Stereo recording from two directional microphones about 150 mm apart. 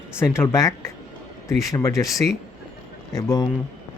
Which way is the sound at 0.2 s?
20° left (ahead or behind).